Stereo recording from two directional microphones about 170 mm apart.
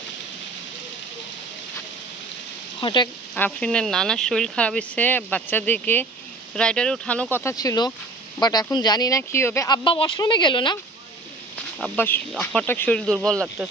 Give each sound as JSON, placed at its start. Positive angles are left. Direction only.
{"t": 2.8, "sound": "speech", "side_deg": 25}
{"t": 3.3, "sound": "speech", "side_deg": 5}
{"t": 9.8, "sound": "speech", "side_deg": 30}
{"t": 11.8, "sound": "speech", "side_deg": 10}